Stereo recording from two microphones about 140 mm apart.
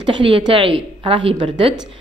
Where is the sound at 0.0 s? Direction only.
40° right (ahead or behind).